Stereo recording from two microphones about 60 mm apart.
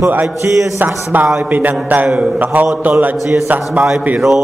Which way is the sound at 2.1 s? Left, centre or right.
Centre.